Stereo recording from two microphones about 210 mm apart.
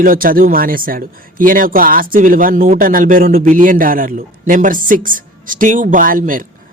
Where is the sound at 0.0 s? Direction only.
40° right (ahead or behind).